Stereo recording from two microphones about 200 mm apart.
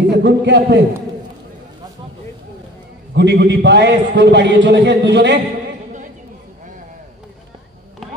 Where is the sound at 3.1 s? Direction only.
60° right (ahead or behind).